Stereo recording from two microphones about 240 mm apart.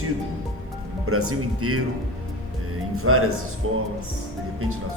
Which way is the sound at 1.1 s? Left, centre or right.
Right.